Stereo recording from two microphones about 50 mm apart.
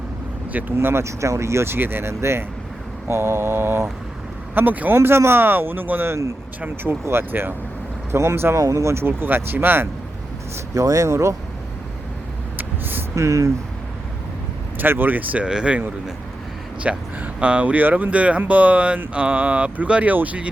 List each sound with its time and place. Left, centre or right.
0.8 s speech: right
1.0 s speech: right
4.5 s speech: right
4.9 s speech: right
7.0 s speech: right
8.1 s speech: right
8.5 s speech: right
9.0 s speech: right
11.0 s speech: right
12.5 s vehicle: right
13.1 s speech: right
14.8 s speech: right
15.4 s speech: right
16.8 s speech: right